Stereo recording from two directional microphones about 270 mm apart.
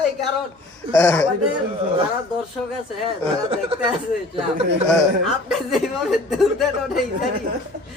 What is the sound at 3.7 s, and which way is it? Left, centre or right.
Speech, right.